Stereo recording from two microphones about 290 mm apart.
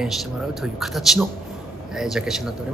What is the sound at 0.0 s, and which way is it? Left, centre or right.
Speech, centre.